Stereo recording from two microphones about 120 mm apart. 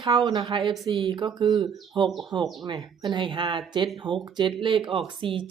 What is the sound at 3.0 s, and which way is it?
Speech, 40° right (ahead or behind).